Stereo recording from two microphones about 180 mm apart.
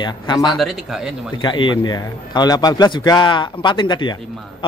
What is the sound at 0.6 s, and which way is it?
Speech, centre (ahead or behind).